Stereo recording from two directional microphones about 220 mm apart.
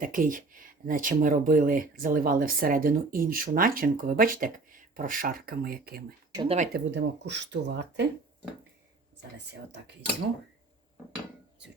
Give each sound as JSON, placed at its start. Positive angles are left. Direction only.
{"t": 0.0, "sound": "speech", "side_deg": -40}
{"t": 6.3, "sound": "speech", "side_deg": -20}
{"t": 6.7, "sound": "speech", "side_deg": -50}